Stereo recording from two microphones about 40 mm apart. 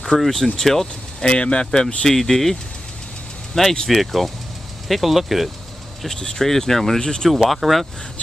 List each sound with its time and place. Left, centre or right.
0.2 s speech: centre
1.3 s speech: left
2.0 s speech: centre
3.8 s speech: centre
6.0 s speech: centre
7.2 s speech: centre